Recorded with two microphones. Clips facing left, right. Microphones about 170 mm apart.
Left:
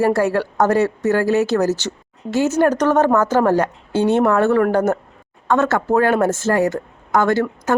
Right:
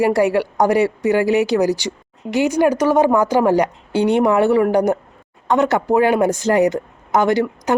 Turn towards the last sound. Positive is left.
turn(degrees=-15)  # may be behind; listen again after turning